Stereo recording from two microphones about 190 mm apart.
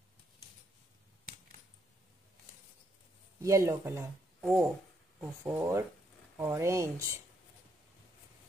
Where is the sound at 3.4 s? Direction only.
15° right (ahead or behind).